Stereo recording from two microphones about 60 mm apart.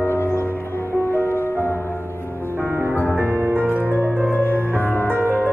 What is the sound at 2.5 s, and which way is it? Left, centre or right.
Music, right.